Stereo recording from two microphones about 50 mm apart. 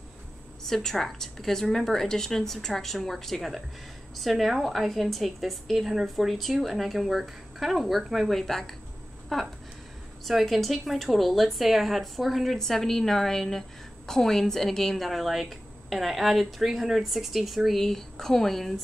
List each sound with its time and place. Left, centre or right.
0.7 s a woman's voice: centre